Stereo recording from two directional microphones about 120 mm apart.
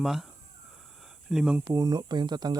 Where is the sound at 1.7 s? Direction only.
35° right (ahead or behind).